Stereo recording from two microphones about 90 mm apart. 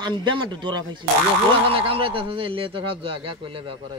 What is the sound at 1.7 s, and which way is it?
Speech, 90° right.